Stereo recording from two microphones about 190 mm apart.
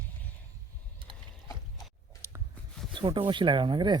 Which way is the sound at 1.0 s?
25° right (ahead or behind).